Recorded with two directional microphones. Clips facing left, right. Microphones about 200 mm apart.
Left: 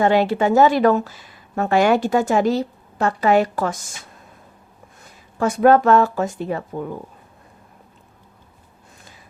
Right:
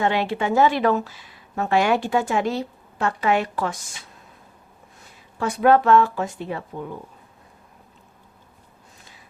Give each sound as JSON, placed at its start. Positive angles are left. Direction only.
{"t": 0.0, "sound": "a woman's voice", "side_deg": 40}
{"t": 5.4, "sound": "speech", "side_deg": 45}